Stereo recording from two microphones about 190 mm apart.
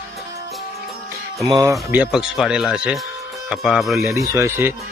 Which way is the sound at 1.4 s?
20° right (ahead or behind).